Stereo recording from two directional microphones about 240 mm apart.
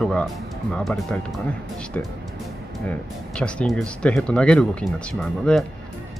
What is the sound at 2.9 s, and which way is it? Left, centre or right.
Speech, centre.